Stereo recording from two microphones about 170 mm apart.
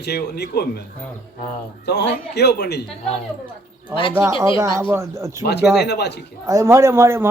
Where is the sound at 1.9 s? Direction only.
75° left (ahead or behind).